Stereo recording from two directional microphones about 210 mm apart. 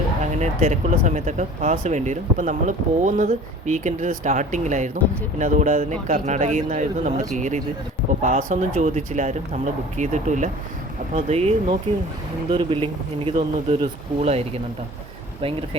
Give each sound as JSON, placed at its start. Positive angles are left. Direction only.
{"t": 0.2, "sound": "a man's voice", "side_deg": -35}